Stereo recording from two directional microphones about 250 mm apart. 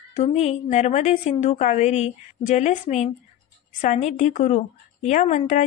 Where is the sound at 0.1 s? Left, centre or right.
Left.